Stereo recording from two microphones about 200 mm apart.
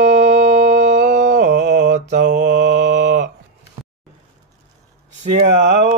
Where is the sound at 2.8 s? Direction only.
60° right (ahead or behind).